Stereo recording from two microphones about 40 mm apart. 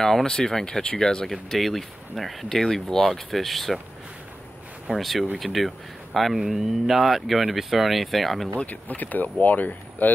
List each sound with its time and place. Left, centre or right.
0.0 s speech: centre
1.3 s speech: centre
2.5 s speech: centre
4.9 s speech: centre
8.5 s speech: left